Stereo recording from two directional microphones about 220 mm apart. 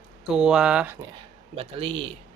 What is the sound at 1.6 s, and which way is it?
Speech, 25° right (ahead or behind).